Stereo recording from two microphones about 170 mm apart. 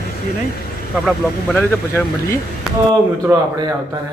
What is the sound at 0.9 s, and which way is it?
Speech, centre (ahead or behind).